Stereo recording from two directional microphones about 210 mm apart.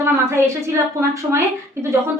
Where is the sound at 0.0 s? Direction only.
10° right (ahead or behind).